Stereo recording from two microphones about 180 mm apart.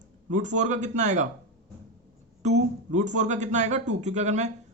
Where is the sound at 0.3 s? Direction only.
45° right (ahead or behind).